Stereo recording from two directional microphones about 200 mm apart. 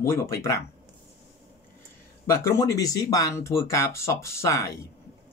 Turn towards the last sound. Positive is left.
turn(degrees=15)  # may be behind; listen again after turning